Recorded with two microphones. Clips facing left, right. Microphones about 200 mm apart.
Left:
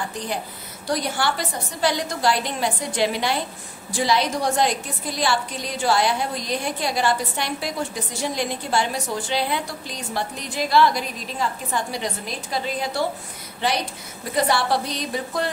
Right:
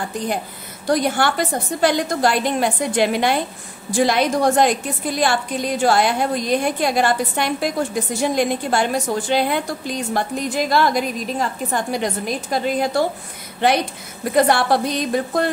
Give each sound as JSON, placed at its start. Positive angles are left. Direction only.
{"t": 0.8, "sound": "a woman's voice", "side_deg": -50}
{"t": 14.3, "sound": "a woman's voice", "side_deg": -50}